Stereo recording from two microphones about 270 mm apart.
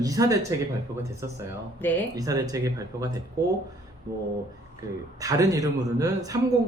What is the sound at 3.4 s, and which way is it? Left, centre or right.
Speech, right.